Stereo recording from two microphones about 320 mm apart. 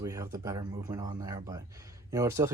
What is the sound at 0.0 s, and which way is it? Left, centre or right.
Speech, centre.